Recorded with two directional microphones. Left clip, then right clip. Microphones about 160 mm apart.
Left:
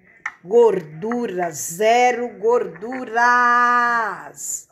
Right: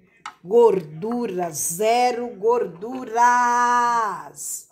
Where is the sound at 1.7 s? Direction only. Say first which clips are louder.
Left 4 dB; centre (ahead or behind).